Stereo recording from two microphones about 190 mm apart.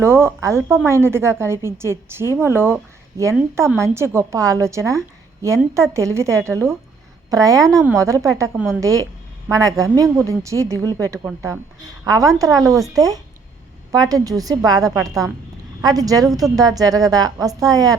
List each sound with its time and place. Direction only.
0.0 s a woman's voice: 15° right (ahead or behind)